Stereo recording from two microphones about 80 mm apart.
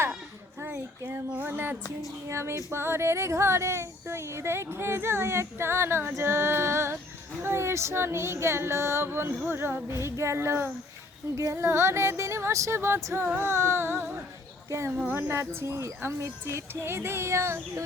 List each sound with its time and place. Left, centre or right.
0.6 s a child's voice: right
2.3 s female singing: right
9.5 s speech: right
10.0 s female singing: right